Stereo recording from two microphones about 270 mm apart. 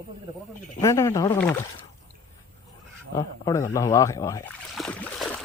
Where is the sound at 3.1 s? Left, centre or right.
Centre.